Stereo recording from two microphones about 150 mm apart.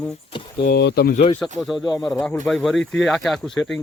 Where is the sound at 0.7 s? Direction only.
85° left.